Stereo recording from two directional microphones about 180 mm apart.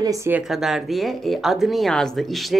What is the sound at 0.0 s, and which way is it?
Speech, 15° right (ahead or behind).